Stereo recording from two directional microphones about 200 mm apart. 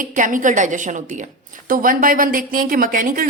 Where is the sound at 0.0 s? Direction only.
40° right (ahead or behind).